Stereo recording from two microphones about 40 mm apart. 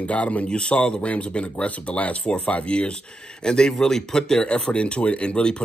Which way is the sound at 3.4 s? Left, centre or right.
Centre.